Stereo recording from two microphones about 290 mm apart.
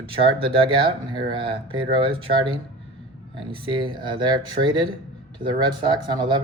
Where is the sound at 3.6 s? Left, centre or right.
Centre.